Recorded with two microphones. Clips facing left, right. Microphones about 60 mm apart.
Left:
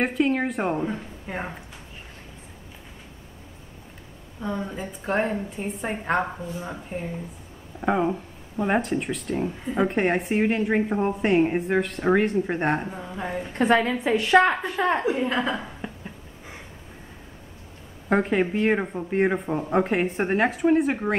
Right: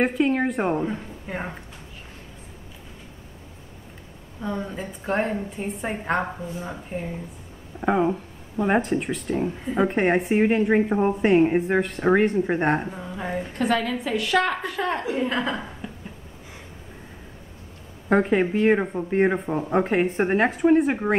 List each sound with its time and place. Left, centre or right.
0.0 s speech: centre
4.4 s speech: centre
13.6 s a woman's voice: left
15.1 s speech: centre
15.8 s a sound: centre
18.0 s speech: centre